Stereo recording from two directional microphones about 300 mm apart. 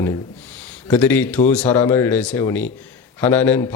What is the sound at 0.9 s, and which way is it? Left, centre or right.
Speech, centre.